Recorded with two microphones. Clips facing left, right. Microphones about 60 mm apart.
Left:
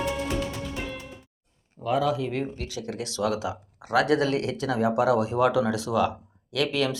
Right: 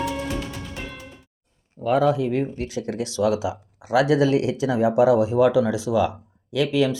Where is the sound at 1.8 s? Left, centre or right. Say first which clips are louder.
Right 5 dB; right.